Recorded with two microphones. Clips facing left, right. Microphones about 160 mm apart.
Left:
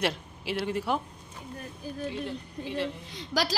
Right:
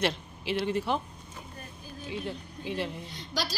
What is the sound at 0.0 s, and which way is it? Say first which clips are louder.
A woman's voice: even; 5° left (ahead or behind).